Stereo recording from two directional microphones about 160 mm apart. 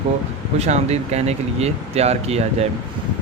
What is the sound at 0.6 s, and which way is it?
Speech, 45° right (ahead or behind).